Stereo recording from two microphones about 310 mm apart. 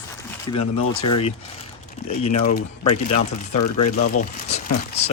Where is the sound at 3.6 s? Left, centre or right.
Left.